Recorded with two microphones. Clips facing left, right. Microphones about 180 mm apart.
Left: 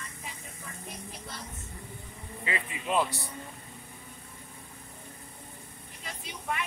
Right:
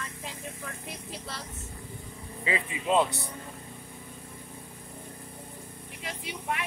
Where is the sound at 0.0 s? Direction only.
90° right.